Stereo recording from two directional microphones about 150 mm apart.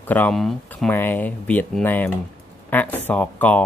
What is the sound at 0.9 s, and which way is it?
Speech, 15° left (ahead or behind).